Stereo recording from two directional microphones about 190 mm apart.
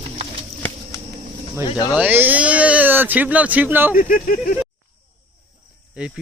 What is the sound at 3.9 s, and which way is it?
Speech, 50° left (ahead or behind).